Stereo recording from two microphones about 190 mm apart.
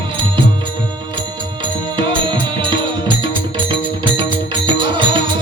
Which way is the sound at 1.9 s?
25° right (ahead or behind).